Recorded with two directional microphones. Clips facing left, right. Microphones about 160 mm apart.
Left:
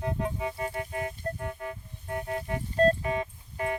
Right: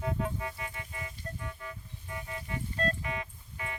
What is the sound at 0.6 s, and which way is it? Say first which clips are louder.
Music: left 10 dB; 45° left (ahead or behind).